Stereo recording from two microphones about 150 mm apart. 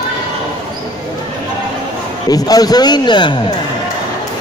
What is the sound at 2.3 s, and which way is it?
A man's voice, 25° left (ahead or behind).